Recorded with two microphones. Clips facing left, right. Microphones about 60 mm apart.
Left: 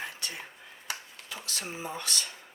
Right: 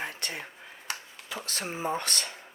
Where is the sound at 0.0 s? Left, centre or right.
Right.